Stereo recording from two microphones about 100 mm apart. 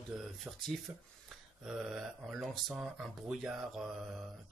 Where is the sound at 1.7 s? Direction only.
5° right (ahead or behind).